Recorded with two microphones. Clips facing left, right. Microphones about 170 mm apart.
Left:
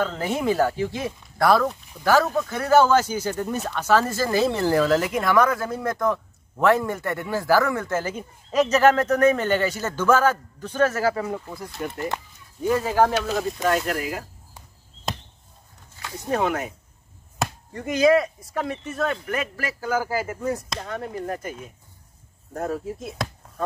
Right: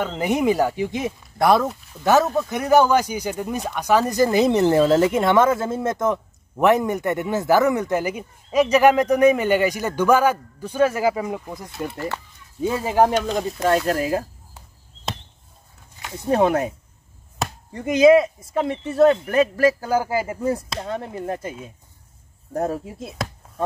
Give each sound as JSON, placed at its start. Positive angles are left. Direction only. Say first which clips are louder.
{"t": 0.0, "sound": "a man's voice", "louder": "right 3 dB", "side_deg": -20}
{"t": 16.3, "sound": "speech", "louder": "right 6 dB", "side_deg": -35}
{"t": 17.7, "sound": "speech", "louder": "right 5 dB", "side_deg": -20}
{"t": 19.3, "sound": "speech", "louder": "right 11 dB", "side_deg": -35}
{"t": 20.0, "sound": "speech", "louder": "right 3 dB", "side_deg": -25}